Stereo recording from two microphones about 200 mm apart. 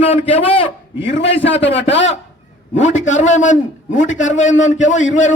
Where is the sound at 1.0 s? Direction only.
60° left (ahead or behind).